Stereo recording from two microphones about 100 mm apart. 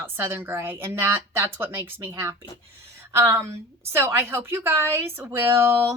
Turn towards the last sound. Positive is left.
turn(degrees=-25)  # may be behind; listen again after turning